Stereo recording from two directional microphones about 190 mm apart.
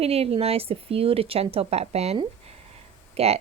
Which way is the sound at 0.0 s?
30° right (ahead or behind).